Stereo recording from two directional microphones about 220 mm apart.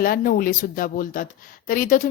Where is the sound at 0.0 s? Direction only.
40° left (ahead or behind).